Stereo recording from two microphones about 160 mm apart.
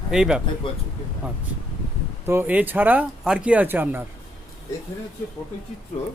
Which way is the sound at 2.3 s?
10° right (ahead or behind).